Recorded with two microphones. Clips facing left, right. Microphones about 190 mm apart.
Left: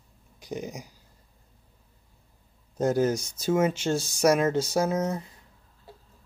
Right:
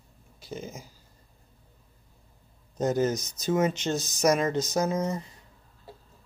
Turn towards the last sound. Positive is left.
turn(degrees=10)  # may be behind; listen again after turning